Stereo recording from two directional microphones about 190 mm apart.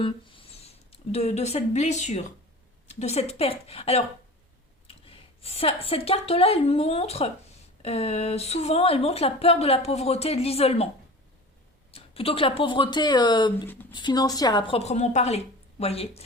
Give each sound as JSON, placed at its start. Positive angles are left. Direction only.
{"t": 0.0, "sound": "speech", "side_deg": 30}
{"t": 11.9, "sound": "speech", "side_deg": 30}
{"t": 14.8, "sound": "speech", "side_deg": 35}